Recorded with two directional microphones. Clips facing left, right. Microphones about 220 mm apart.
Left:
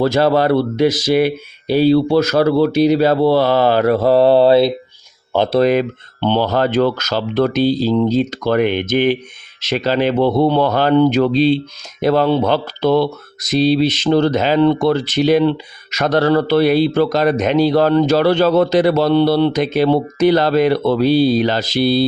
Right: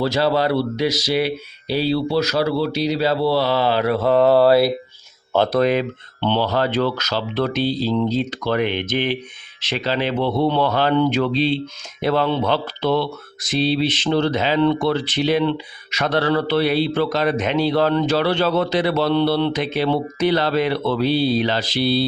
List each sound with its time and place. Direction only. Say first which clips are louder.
0.0 s speech: left 5 dB; 50° left (ahead or behind); by 4.7 s 25° left (ahead or behind)
5.5 s speech: left 4 dB; 35° left (ahead or behind)